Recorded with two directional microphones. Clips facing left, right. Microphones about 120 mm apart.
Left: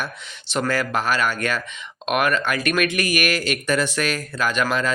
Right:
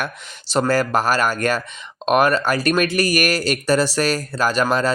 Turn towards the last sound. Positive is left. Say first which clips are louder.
# right 4 dB
turn(degrees=-35)  # may be behind; listen again after turning